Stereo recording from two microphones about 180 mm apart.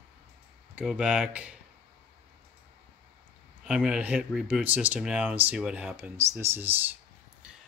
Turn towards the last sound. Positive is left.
turn(degrees=-10)  # may be behind; listen again after turning